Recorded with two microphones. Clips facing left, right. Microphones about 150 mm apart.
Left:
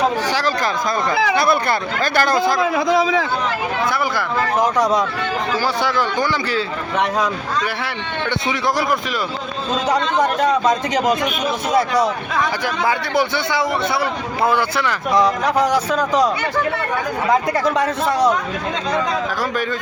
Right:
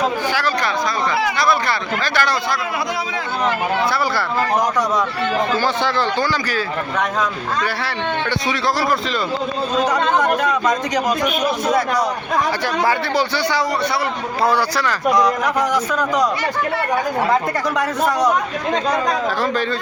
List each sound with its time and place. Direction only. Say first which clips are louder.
2.1 s a man's voice: left 4 dB; 45° left (ahead or behind)
9.8 s speech: even; 30° left (ahead or behind)
14.4 s speech: even; 20° left (ahead or behind)